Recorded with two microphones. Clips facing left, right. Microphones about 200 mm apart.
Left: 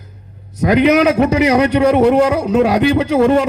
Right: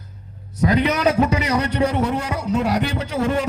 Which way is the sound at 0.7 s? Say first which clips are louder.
Left 8 dB; 85° left.